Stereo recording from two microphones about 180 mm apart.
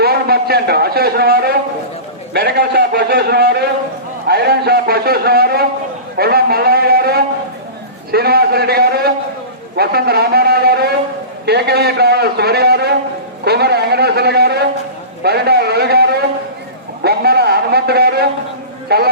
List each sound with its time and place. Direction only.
0.0 s a man's voice: 60° right (ahead or behind)